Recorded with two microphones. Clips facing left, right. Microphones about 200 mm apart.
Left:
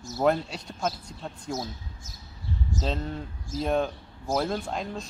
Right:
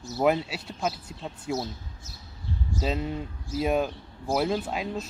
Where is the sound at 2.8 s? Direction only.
10° right (ahead or behind).